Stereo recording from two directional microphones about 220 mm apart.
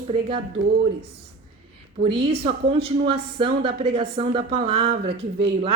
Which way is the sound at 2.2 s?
25° right (ahead or behind).